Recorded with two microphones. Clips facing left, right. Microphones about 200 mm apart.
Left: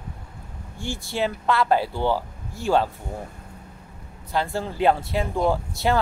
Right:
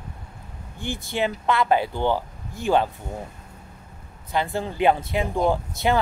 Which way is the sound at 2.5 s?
15° right (ahead or behind).